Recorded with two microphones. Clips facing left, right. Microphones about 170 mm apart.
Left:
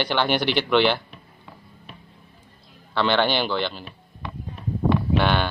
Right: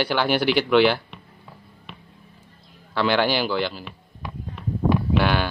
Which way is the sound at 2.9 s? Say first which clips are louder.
Even; 5° right (ahead or behind).